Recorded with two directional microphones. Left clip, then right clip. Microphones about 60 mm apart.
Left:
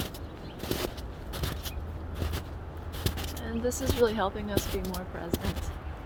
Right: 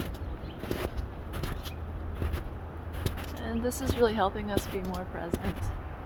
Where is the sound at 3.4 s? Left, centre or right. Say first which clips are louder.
Left 1 dB; right.